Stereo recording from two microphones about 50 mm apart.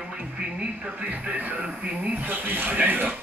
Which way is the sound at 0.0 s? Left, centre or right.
Right.